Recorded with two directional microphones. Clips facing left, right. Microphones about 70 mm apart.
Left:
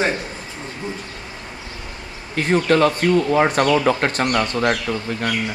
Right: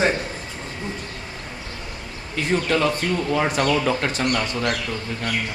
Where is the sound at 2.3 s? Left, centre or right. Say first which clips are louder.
Left 5 dB; left.